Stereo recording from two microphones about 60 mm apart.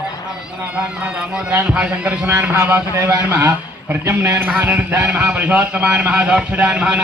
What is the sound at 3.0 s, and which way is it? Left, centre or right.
A man's voice, right.